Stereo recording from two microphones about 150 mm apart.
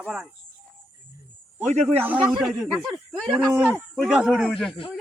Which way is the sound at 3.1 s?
Centre (ahead or behind).